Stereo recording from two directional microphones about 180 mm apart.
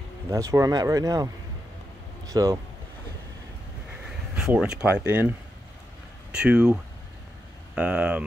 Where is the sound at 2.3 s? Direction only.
20° right (ahead or behind).